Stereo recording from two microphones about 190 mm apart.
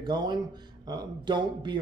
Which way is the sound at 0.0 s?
20° right (ahead or behind).